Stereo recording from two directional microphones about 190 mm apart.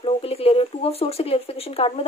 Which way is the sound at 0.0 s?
30° left (ahead or behind).